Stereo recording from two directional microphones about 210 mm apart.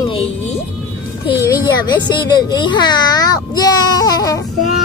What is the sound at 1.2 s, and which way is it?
A child's voice, 15° left (ahead or behind).